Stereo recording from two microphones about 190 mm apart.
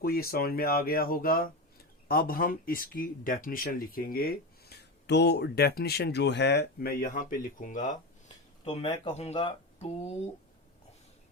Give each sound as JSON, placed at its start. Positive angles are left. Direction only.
{"t": 0.0, "sound": "speech", "side_deg": 50}
{"t": 7.1, "sound": "speech", "side_deg": 45}
{"t": 8.6, "sound": "speech", "side_deg": 25}